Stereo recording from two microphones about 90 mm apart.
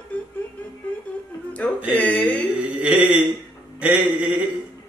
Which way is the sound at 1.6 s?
15° left (ahead or behind).